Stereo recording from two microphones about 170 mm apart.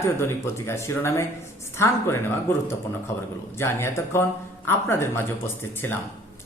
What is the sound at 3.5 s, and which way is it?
A man's voice, 15° left (ahead or behind).